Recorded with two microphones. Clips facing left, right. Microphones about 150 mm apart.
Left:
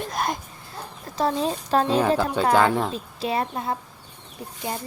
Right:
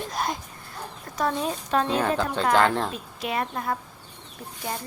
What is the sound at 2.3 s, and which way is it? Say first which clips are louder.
Speech: right 1 dB; 10° left (ahead or behind).